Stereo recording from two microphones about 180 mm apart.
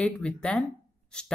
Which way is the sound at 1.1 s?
5° left (ahead or behind).